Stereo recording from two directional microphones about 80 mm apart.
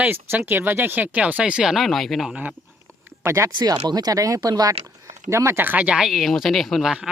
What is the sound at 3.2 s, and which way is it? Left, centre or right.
Speech, right.